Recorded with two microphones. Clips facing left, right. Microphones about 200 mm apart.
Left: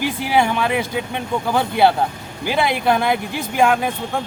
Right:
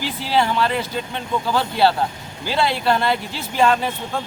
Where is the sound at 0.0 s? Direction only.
15° left (ahead or behind).